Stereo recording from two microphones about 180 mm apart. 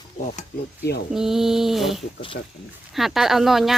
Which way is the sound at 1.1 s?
Centre (ahead or behind).